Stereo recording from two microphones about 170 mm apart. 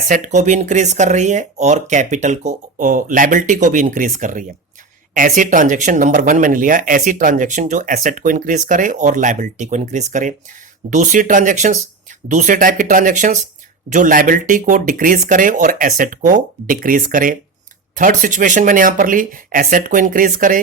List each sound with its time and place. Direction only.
0.1 s speech: 45° right (ahead or behind)